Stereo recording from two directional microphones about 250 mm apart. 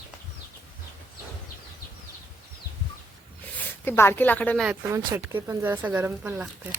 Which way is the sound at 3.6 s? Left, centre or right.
Centre.